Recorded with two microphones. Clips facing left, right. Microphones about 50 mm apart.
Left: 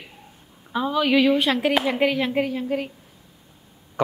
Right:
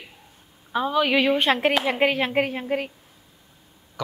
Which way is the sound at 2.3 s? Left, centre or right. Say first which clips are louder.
Even; right.